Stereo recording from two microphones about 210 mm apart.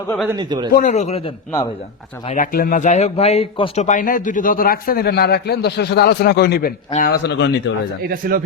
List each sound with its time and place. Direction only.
0.3 s speech: 20° right (ahead or behind)
0.7 s speech: 40° left (ahead or behind); by 7.5 s 55° left (ahead or behind)
8.1 s speech: 45° right (ahead or behind)